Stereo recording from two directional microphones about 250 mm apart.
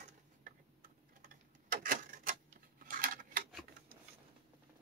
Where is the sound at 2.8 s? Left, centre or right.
Right.